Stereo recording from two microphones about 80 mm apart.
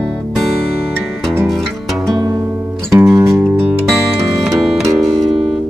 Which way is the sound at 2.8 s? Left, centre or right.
Right.